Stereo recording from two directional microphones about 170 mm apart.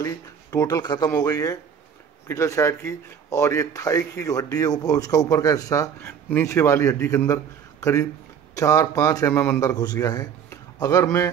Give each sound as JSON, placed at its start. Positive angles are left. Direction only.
{"t": 0.0, "sound": "speech", "side_deg": 20}